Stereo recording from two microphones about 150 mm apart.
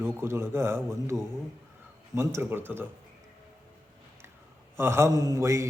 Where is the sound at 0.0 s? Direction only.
15° right (ahead or behind).